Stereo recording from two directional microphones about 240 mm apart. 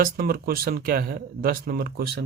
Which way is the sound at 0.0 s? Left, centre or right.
Right.